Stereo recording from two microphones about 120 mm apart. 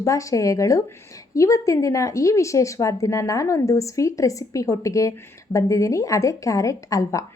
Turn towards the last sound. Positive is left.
turn(degrees=25)  # may be behind; listen again after turning